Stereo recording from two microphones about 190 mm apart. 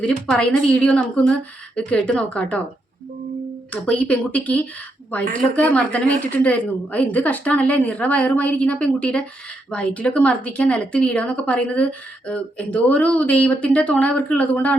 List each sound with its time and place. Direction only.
0.0 s a woman's voice: 5° left (ahead or behind)
3.7 s speech: 5° left (ahead or behind)